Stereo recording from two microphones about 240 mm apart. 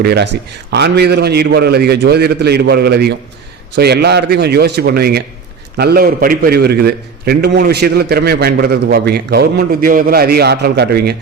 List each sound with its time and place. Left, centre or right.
0.0 s a man's voice: right